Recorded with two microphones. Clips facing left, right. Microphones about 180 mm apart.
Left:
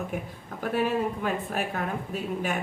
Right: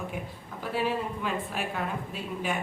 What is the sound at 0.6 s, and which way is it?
Speech, 50° left (ahead or behind).